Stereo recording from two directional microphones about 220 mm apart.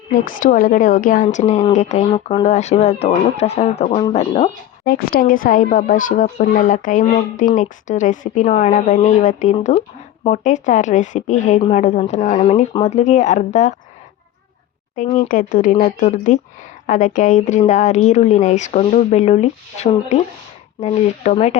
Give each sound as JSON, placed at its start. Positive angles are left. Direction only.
{"t": 0.3, "sound": "a woman's voice", "side_deg": 40}
{"t": 4.9, "sound": "a woman's voice", "side_deg": 45}
{"t": 14.9, "sound": "a woman's voice", "side_deg": 35}